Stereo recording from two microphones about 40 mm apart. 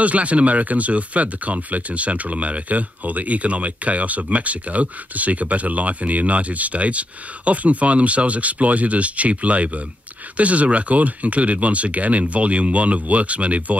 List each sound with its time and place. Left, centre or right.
0.0 s speech: right